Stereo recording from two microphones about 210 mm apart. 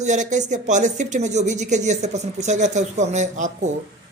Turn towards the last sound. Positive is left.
turn(degrees=-35)  # may be behind; listen again after turning